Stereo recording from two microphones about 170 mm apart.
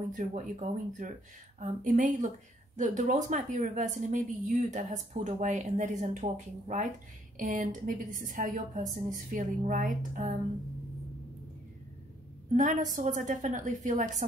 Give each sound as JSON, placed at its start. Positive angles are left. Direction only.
{"t": 0.1, "sound": "speech", "side_deg": -45}
{"t": 12.4, "sound": "speech", "side_deg": -45}